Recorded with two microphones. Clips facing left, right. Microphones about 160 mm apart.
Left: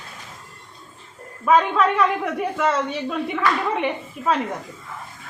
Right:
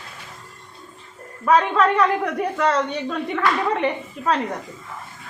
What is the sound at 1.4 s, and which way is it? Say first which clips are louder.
A woman's voice: even; centre (ahead or behind).